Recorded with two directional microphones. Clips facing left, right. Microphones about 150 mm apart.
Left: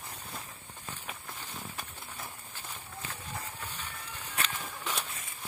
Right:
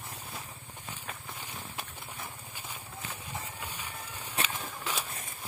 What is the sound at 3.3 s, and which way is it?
Run, 10° right (ahead or behind).